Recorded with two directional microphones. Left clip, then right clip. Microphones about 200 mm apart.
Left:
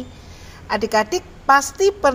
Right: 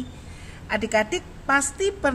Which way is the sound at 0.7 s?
20° left (ahead or behind).